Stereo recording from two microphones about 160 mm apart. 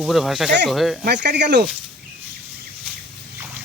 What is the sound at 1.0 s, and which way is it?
Speech, 90° right.